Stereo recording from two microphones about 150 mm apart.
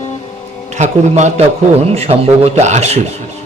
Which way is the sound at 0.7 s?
50° right (ahead or behind).